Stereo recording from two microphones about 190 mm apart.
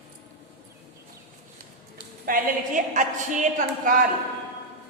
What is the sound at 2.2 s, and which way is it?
A woman's voice, 45° right (ahead or behind).